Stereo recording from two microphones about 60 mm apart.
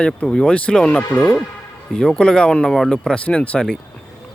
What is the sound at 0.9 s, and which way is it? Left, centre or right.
Speech, left.